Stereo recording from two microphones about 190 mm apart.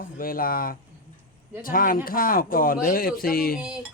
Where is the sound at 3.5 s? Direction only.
5° right (ahead or behind).